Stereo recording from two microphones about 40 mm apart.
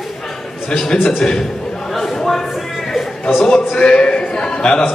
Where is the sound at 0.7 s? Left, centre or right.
Centre.